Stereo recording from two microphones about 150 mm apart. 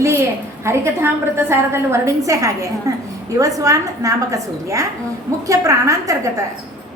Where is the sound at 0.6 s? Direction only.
15° right (ahead or behind).